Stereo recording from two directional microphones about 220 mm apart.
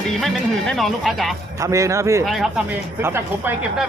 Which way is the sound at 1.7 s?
15° right (ahead or behind).